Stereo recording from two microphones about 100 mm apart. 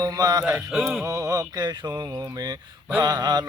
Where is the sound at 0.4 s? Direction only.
5° right (ahead or behind).